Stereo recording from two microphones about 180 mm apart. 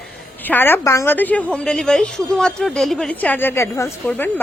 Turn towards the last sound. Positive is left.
turn(degrees=15)  # may be behind; listen again after turning